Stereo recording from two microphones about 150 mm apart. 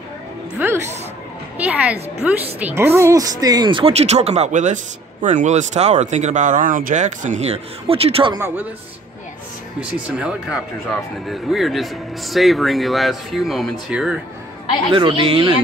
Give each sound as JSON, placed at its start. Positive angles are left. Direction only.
{"t": 0.6, "sound": "a sound", "side_deg": -15}
{"t": 1.6, "sound": "speech", "side_deg": -10}
{"t": 9.8, "sound": "speech", "side_deg": -5}
{"t": 14.9, "sound": "speech", "side_deg": -35}